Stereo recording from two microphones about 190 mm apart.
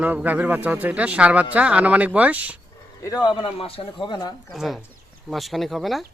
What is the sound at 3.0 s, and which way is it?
Speech, 20° left (ahead or behind).